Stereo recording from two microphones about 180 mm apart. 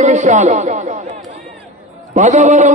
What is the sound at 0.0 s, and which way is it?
Speech, 40° right (ahead or behind).